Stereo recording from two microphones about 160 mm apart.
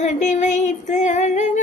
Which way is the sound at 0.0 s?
45° left (ahead or behind).